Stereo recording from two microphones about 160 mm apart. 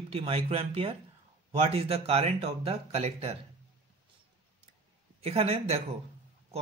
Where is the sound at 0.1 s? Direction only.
40° right (ahead or behind).